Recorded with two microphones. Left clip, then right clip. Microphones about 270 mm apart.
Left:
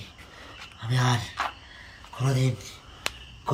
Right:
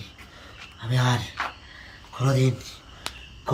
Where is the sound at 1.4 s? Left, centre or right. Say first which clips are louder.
Even; left.